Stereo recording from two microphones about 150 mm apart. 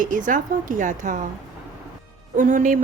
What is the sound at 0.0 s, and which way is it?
Speech, 60° right (ahead or behind).